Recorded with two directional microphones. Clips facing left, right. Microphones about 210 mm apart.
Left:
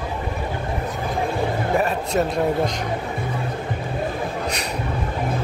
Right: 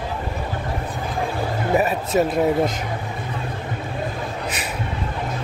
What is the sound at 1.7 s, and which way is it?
A man's voice, 5° right (ahead or behind).